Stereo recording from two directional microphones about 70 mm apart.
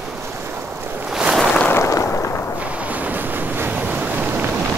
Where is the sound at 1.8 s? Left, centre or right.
Left.